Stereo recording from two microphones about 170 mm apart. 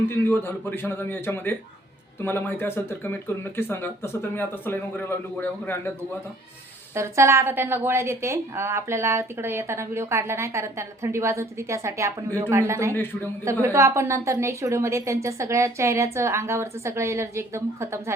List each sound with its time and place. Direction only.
0.0 s speech: 15° left (ahead or behind)
6.9 s a woman's voice: 15° right (ahead or behind)
12.9 s speech: 10° left (ahead or behind)
13.4 s a woman's voice: 15° right (ahead or behind)